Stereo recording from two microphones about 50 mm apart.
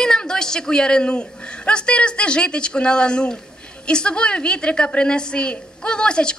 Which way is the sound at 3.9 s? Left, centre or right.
Centre.